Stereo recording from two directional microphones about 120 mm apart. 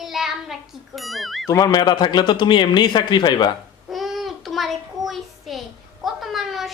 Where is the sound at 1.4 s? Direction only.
30° left (ahead or behind).